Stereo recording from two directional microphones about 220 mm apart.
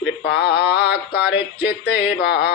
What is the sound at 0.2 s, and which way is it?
Male singing, 50° left (ahead or behind).